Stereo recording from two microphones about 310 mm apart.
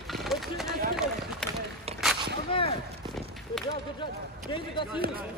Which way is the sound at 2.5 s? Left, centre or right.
Centre.